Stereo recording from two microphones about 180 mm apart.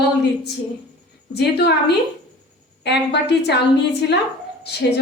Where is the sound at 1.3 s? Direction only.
65° left (ahead or behind).